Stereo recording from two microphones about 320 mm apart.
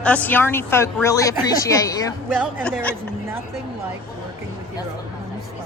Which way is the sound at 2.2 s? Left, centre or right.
Centre.